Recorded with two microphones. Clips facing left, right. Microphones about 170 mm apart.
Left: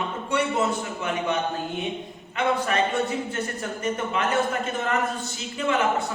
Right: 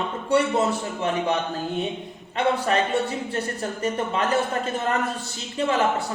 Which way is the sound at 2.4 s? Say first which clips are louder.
Right 2 dB; 35° right (ahead or behind).